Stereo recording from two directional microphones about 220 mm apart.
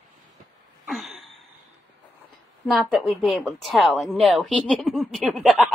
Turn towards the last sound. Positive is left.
turn(degrees=0)  # may be behind; listen again after turning